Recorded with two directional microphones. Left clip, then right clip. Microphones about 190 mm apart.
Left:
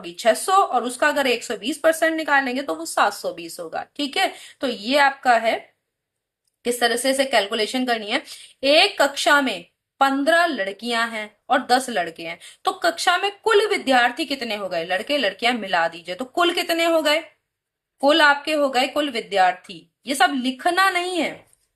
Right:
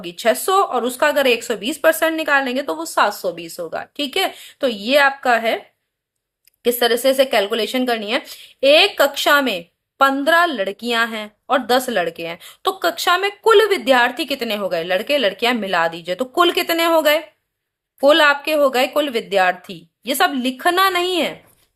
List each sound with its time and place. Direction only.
0.0 s a woman's voice: 40° right (ahead or behind)
6.6 s a woman's voice: 40° right (ahead or behind)